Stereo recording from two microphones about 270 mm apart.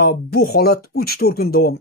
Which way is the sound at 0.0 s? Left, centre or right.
Left.